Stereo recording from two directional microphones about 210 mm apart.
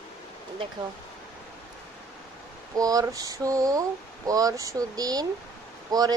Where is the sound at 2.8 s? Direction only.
15° right (ahead or behind).